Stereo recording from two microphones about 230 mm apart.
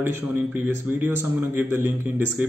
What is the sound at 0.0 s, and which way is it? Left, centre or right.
A man's voice, centre.